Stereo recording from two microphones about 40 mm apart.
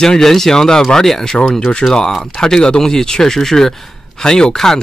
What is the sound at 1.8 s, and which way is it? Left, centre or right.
Speech, left.